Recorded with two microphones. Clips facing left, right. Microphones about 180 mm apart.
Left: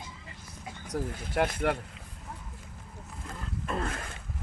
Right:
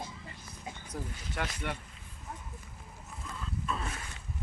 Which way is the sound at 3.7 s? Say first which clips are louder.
Left 6 dB; 55° left (ahead or behind).